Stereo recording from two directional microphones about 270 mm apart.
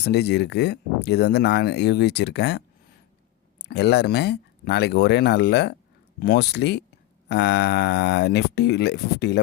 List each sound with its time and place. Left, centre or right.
0.0 s speech: left